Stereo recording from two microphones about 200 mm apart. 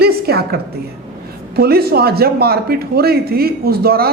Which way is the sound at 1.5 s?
50° right (ahead or behind).